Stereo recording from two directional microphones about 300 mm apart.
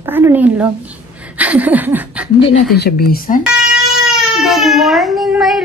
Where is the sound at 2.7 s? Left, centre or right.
Left.